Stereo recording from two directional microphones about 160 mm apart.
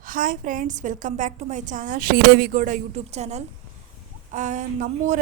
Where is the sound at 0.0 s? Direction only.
60° right (ahead or behind).